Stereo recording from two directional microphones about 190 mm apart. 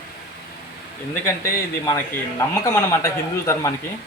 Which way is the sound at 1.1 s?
15° left (ahead or behind).